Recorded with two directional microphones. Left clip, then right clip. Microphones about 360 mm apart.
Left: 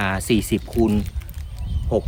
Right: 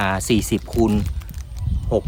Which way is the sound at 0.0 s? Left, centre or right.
Centre.